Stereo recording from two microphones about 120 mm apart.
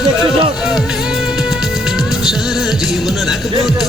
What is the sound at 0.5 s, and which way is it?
Music, 5° right (ahead or behind).